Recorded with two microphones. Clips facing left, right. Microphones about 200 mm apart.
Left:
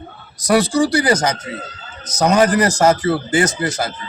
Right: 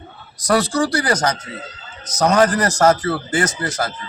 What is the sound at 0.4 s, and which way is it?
Speech, 10° left (ahead or behind).